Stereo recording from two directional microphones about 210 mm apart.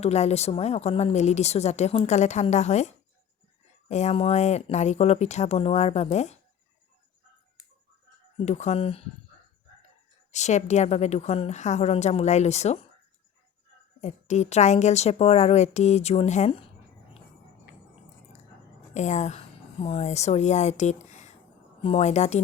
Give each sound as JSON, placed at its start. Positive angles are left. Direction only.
{"t": 0.0, "sound": "a woman's voice", "side_deg": 30}
{"t": 8.4, "sound": "a woman's voice", "side_deg": 35}
{"t": 10.3, "sound": "a woman's voice", "side_deg": 35}
{"t": 14.0, "sound": "a woman's voice", "side_deg": 35}
{"t": 18.9, "sound": "a woman's voice", "side_deg": 35}